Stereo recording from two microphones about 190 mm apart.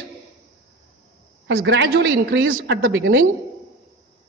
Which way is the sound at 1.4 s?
65° right (ahead or behind).